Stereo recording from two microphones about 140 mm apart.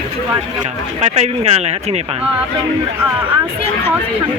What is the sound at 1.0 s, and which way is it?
Speech, 50° right (ahead or behind).